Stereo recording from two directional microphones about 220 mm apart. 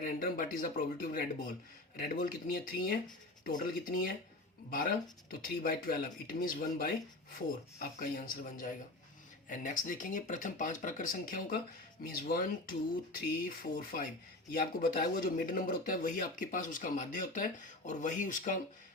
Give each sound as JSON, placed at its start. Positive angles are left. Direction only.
{"t": 0.0, "sound": "speech", "side_deg": 40}
{"t": 13.6, "sound": "speech", "side_deg": 40}